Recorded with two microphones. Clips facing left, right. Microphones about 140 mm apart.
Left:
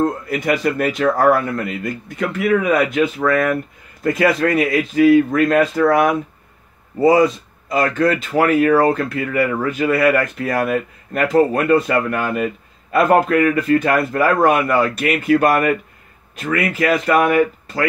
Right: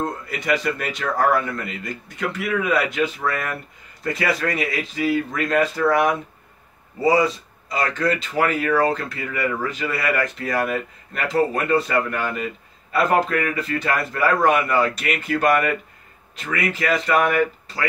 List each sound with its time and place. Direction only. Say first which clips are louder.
0.0 s speech: left 8 dB; 50° left (ahead or behind)
7.0 s speech: left 5 dB; 50° left (ahead or behind)